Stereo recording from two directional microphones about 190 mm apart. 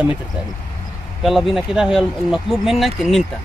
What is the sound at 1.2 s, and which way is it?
Speech, centre (ahead or behind).